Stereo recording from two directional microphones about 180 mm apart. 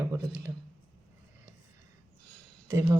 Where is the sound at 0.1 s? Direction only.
15° right (ahead or behind).